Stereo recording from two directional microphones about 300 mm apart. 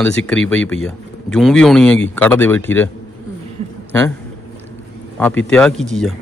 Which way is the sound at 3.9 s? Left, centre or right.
Centre.